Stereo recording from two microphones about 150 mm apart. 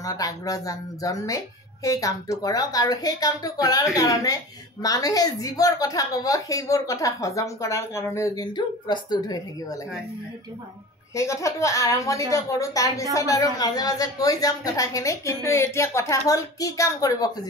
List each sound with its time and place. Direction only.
0.0 s a woman's voice: 25° left (ahead or behind)
11.1 s a woman's voice: 20° left (ahead or behind)